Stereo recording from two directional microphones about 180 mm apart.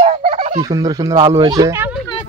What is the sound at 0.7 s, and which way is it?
Speech, 20° right (ahead or behind).